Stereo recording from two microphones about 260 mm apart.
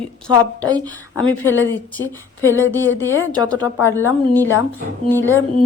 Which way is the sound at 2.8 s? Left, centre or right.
Centre.